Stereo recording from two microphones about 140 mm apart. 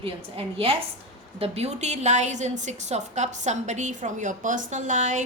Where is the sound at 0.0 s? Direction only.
45° right (ahead or behind).